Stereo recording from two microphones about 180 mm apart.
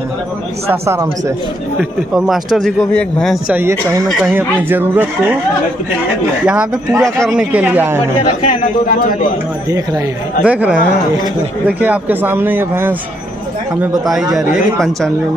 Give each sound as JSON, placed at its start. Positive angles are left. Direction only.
{"t": 0.7, "sound": "speech", "side_deg": -15}
{"t": 1.8, "sound": "speech", "side_deg": 0}
{"t": 3.5, "sound": "speech", "side_deg": -15}
{"t": 6.4, "sound": "speech", "side_deg": -5}
{"t": 8.3, "sound": "a man's voice", "side_deg": 45}
{"t": 10.4, "sound": "speech", "side_deg": -5}
{"t": 14.3, "sound": "speech", "side_deg": 0}